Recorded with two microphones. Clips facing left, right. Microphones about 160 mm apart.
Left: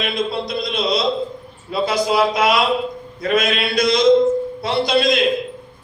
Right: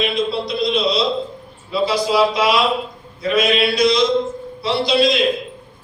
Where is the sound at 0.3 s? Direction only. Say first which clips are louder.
Right 3 dB; 50° left (ahead or behind).